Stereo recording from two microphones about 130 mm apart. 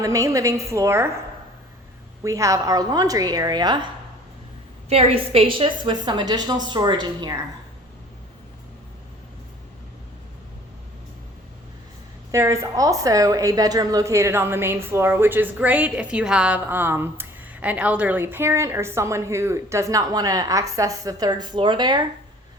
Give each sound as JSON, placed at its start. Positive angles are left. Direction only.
{"t": 0.0, "sound": "a woman's voice", "side_deg": -25}
{"t": 2.2, "sound": "a woman's voice", "side_deg": -25}
{"t": 4.9, "sound": "a woman's voice", "side_deg": -50}
{"t": 12.3, "sound": "a woman's voice", "side_deg": -20}